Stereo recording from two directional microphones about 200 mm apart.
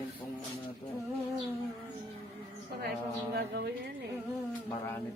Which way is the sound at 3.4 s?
55° right (ahead or behind).